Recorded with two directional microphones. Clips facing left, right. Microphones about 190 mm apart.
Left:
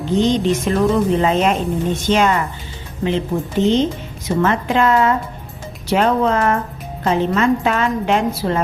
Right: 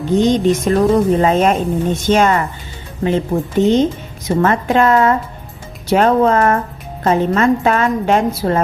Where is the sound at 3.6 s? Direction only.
45° right (ahead or behind).